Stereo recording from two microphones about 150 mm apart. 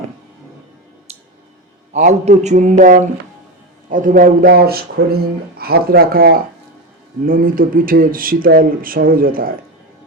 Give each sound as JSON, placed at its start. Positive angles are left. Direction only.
{"t": 1.9, "sound": "speech", "side_deg": -55}
{"t": 7.3, "sound": "speech", "side_deg": -70}